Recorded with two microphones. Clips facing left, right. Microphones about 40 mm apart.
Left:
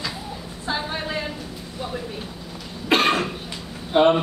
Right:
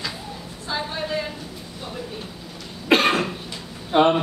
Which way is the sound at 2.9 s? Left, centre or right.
Centre.